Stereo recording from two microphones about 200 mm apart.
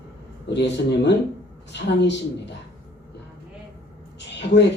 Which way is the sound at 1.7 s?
60° left (ahead or behind).